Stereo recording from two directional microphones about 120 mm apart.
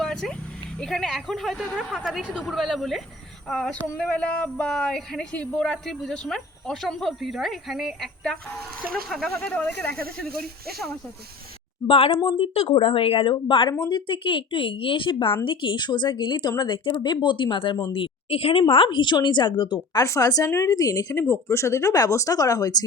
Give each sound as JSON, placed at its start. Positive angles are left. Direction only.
{"t": 0.0, "sound": "a sound", "side_deg": 5}
{"t": 0.8, "sound": "speech", "side_deg": 5}
{"t": 11.9, "sound": "a woman's voice", "side_deg": 55}